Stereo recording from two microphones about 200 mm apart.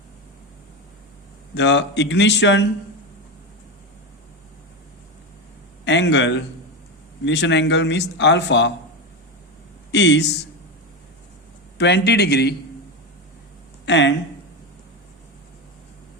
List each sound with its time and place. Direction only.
1.5 s speech: 60° left (ahead or behind)
5.8 s a man's voice: 60° left (ahead or behind)
9.9 s speech: 60° left (ahead or behind)
11.8 s speech: 55° left (ahead or behind)
13.8 s speech: 60° left (ahead or behind)